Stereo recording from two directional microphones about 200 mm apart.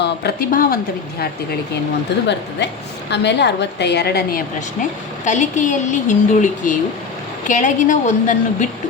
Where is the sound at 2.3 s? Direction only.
60° left (ahead or behind).